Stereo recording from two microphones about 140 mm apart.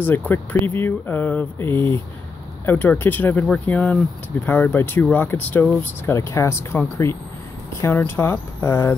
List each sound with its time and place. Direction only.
0.0 s speech: 15° left (ahead or behind)
7.8 s speech: 15° left (ahead or behind)